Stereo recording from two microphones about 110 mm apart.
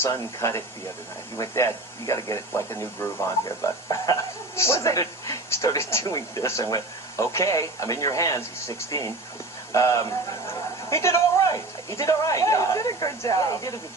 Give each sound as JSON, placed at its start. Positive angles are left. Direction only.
{"t": 0.0, "sound": "speech", "side_deg": 25}
{"t": 3.4, "sound": "a man's voice", "side_deg": 30}